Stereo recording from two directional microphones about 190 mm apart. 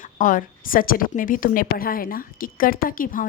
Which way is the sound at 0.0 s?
45° left (ahead or behind).